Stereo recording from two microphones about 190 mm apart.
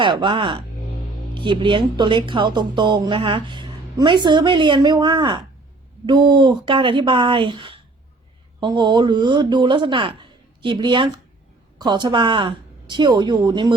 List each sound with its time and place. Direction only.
0.0 s speech: 25° right (ahead or behind)